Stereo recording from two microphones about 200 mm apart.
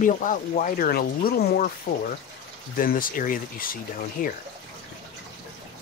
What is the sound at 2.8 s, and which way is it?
Speech, 45° left (ahead or behind).